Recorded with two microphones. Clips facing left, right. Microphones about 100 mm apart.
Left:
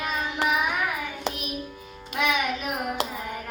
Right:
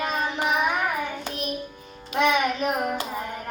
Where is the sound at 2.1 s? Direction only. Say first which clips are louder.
Right 4 dB; 35° right (ahead or behind).